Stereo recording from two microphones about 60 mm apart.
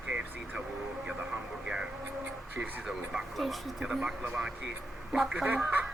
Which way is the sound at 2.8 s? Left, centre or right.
Centre.